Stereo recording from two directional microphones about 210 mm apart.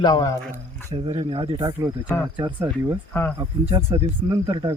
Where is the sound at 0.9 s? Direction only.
30° right (ahead or behind).